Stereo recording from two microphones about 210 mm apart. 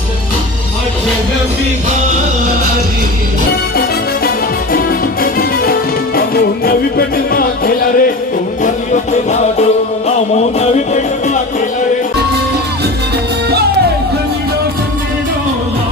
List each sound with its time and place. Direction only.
4.7 s music: 45° left (ahead or behind)